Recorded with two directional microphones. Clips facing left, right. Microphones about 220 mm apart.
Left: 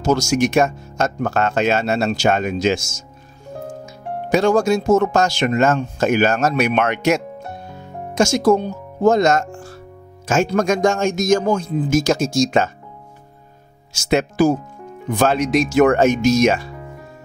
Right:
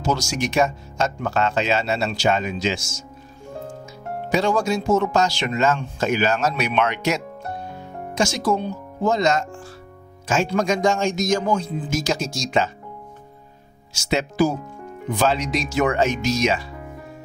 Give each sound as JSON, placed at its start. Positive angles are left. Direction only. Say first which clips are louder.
{"t": 0.0, "sound": "speech", "louder": "left 7 dB", "side_deg": 45}
{"t": 4.3, "sound": "speech", "louder": "left 5 dB", "side_deg": 45}
{"t": 13.9, "sound": "speech", "louder": "left 4 dB", "side_deg": 50}